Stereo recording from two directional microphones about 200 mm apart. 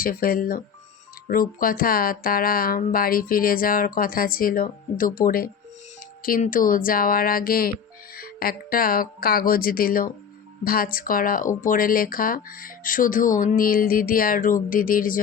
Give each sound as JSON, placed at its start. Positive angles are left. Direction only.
{"t": 0.0, "sound": "speech", "side_deg": 45}